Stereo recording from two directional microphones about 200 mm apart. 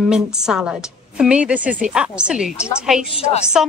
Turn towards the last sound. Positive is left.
turn(degrees=30)  # may be behind; listen again after turning